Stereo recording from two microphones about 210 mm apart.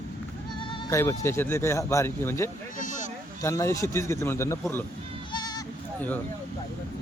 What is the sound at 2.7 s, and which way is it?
Sheep, 40° left (ahead or behind).